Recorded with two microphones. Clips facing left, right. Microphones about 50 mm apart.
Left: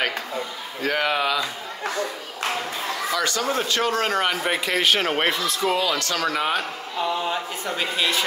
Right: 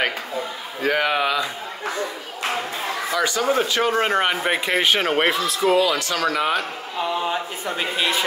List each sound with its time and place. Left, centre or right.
0.8 s speech: centre
3.1 s speech: centre
5.0 s speech: centre